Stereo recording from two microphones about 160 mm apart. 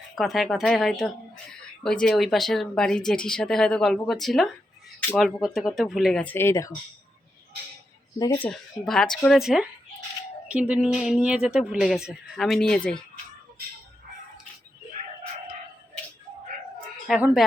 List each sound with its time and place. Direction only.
0.2 s speech: centre (ahead or behind); by 6.7 s 20° left (ahead or behind)
8.2 s speech: 25° left (ahead or behind)
8.4 s speech: 5° left (ahead or behind)
17.1 s speech: 5° right (ahead or behind)